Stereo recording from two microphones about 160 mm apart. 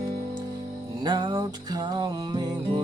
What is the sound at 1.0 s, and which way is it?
Music, 25° right (ahead or behind).